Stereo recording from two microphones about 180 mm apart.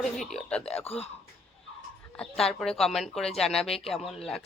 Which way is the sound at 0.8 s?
35° left (ahead or behind).